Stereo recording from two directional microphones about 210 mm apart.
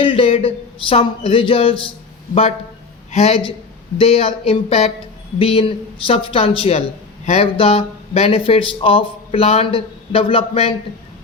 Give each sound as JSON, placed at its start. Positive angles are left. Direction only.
{"t": 0.0, "sound": "speech", "side_deg": 25}
{"t": 3.1, "sound": "a man's voice", "side_deg": 30}